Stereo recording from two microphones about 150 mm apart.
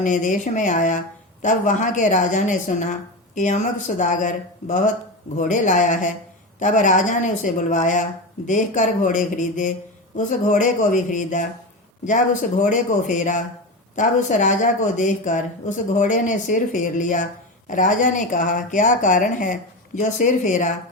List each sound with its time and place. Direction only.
0.0 s speech: 55° left (ahead or behind)